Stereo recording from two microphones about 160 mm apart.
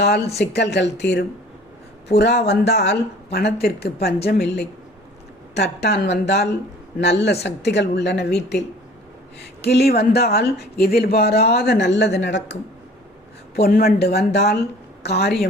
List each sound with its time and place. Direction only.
0.3 s speech: 90° left
13.6 s speech: 70° left (ahead or behind); by 15.4 s 85° left